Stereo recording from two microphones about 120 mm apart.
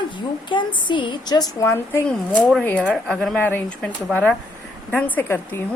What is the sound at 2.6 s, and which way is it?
Speech, 10° left (ahead or behind).